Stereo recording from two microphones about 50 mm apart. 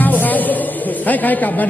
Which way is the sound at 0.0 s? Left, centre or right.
Left.